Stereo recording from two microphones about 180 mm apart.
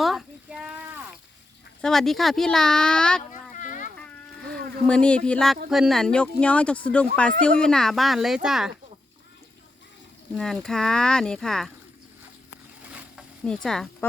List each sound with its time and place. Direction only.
0.0 s a sound: centre (ahead or behind)
1.8 s speech: centre (ahead or behind)
3.5 s a sound: 45° left (ahead or behind)
4.9 s speech: 5° left (ahead or behind)
10.3 s speech: 5° left (ahead or behind)
12.8 s stir: 5° right (ahead or behind)
13.4 s speech: 5° left (ahead or behind)